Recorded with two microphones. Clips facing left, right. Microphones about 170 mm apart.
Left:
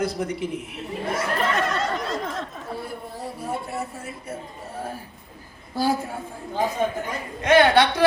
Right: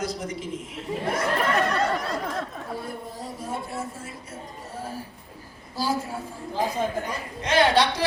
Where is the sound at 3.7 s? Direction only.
60° left (ahead or behind).